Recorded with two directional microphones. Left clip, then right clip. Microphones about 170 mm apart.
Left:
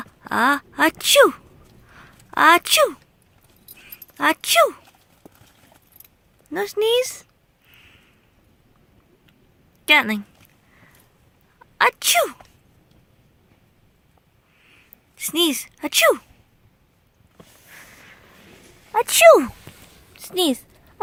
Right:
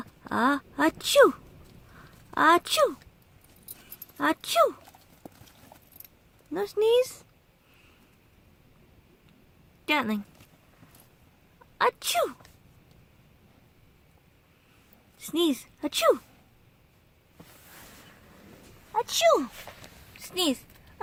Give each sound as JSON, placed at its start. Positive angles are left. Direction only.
{"t": 0.0, "sound": "speech", "side_deg": -5}
{"t": 4.2, "sound": "speech", "side_deg": -5}
{"t": 6.5, "sound": "speech", "side_deg": 0}
{"t": 9.8, "sound": "speech", "side_deg": 0}
{"t": 11.8, "sound": "speech", "side_deg": 0}
{"t": 15.2, "sound": "speech", "side_deg": 0}
{"t": 18.9, "sound": "a child's voice", "side_deg": 30}